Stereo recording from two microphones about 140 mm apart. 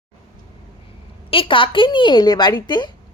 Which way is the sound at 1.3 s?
40° left (ahead or behind).